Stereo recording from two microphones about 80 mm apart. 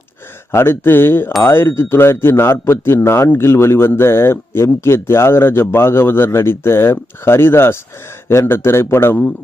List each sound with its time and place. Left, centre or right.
0.5 s speech: left